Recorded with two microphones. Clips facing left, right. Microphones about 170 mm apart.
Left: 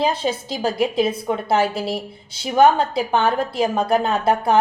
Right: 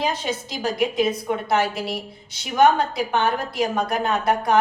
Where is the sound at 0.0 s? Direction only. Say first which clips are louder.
Left 4 dB; 30° left (ahead or behind).